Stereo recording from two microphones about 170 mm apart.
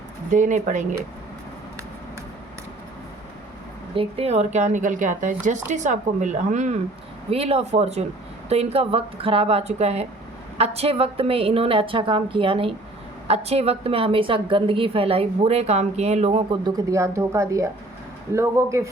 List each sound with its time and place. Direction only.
0.3 s speech: 45° right (ahead or behind)
3.9 s a woman's voice: 35° right (ahead or behind); by 18.9 s 15° right (ahead or behind)